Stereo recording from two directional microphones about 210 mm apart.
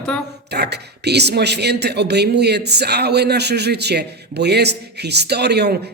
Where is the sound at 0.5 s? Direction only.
50° right (ahead or behind).